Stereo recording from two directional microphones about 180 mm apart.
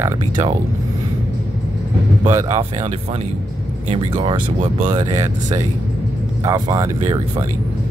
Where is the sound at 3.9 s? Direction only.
30° right (ahead or behind).